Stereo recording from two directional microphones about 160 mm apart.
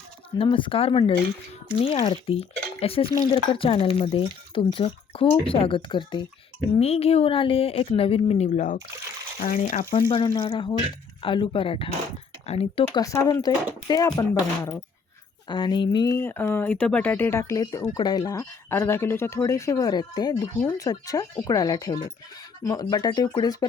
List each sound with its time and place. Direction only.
0.3 s speech: 30° left (ahead or behind); by 9.8 s 50° left (ahead or behind)
10.3 s speech: 30° left (ahead or behind)
13.0 s speech: 20° left (ahead or behind)